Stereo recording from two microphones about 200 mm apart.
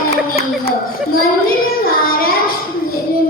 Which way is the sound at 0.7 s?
45° left (ahead or behind).